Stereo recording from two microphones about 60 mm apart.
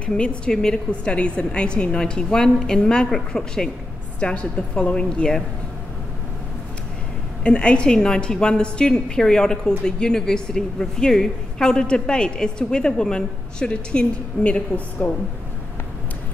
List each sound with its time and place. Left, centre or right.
0.2 s a woman's voice: centre
7.4 s a woman's voice: centre